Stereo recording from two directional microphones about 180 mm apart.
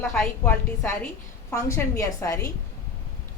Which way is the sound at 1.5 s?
15° left (ahead or behind).